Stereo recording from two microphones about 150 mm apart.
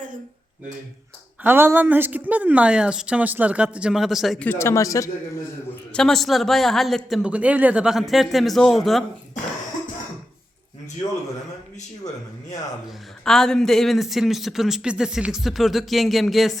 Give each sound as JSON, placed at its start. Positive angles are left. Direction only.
{"t": 1.5, "sound": "speech", "side_deg": -15}
{"t": 4.4, "sound": "speech", "side_deg": 20}
{"t": 5.9, "sound": "speech", "side_deg": 5}
{"t": 13.2, "sound": "speech", "side_deg": 5}